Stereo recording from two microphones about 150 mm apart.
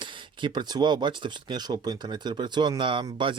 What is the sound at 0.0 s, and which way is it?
Speech, 30° right (ahead or behind).